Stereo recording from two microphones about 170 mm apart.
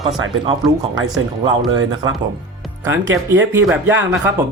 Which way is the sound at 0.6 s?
Centre (ahead or behind).